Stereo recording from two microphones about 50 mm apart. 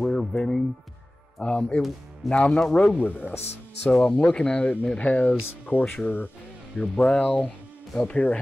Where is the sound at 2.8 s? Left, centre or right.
Left.